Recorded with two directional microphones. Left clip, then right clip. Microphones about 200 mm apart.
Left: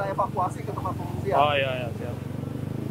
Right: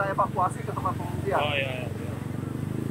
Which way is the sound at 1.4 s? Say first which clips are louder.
Left 5 dB; 45° left (ahead or behind).